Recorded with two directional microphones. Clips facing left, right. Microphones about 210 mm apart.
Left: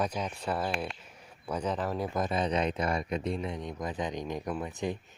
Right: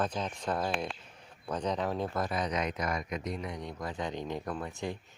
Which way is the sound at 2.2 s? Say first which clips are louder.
Left 3 dB; 25° left (ahead or behind).